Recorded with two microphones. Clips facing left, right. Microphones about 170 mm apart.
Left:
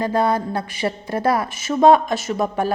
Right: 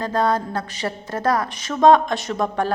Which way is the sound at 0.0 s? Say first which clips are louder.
Left 2 dB; 10° left (ahead or behind).